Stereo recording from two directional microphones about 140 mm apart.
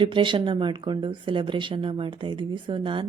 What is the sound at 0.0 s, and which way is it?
Speech, 35° right (ahead or behind).